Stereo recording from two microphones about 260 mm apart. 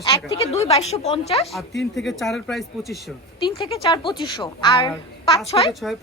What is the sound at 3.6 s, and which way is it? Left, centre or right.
A woman's voice, centre.